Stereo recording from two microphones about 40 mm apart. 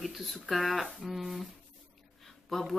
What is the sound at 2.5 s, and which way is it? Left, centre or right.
Speech, centre.